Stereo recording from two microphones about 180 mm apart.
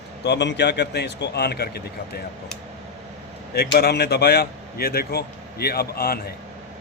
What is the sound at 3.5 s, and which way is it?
A man's voice, 60° left (ahead or behind).